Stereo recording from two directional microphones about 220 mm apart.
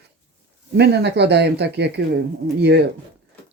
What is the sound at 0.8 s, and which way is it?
Speech, 50° right (ahead or behind).